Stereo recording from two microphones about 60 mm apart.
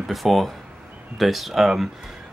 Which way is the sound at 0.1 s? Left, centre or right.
Centre.